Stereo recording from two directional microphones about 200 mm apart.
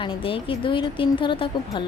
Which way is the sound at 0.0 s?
25° left (ahead or behind).